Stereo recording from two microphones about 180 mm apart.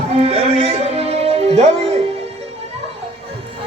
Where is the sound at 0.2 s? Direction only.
30° right (ahead or behind).